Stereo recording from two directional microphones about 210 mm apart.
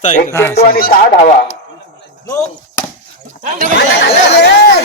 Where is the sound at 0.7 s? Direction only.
45° left (ahead or behind).